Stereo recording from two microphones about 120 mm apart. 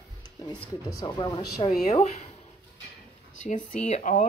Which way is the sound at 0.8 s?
30° left (ahead or behind).